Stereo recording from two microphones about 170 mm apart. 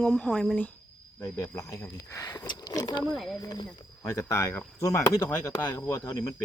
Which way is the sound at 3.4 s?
20° left (ahead or behind).